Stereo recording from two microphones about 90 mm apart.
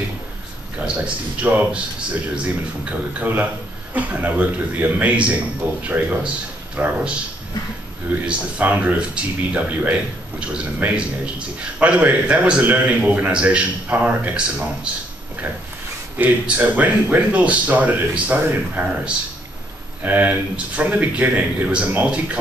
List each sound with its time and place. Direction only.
0.8 s a man's voice: 15° right (ahead or behind)
8.3 s a man's voice: 15° right (ahead or behind)
16.2 s a man's voice: 15° right (ahead or behind)